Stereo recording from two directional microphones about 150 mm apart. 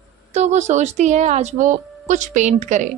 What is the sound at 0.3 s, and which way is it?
Speech, 50° right (ahead or behind).